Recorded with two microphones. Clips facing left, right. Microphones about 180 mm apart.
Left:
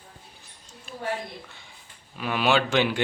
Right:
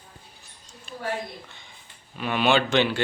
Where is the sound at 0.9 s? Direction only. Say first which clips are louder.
Right 1 dB; 5° left (ahead or behind).